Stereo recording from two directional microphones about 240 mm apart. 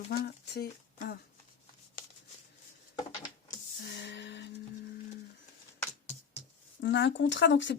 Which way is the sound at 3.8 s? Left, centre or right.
Left.